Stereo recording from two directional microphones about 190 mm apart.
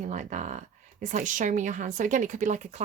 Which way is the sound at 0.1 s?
40° right (ahead or behind).